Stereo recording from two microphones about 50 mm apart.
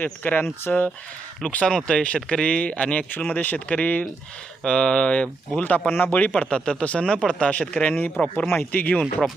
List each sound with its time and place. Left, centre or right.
0.0 s speech: left
1.5 s speech: centre
4.6 s speech: centre
5.9 s speech: left
6.3 s speech: centre
7.9 s speech: left